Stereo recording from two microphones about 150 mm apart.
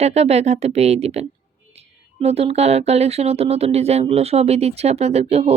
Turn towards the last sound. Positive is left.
turn(degrees=-45)  # may be behind; listen again after turning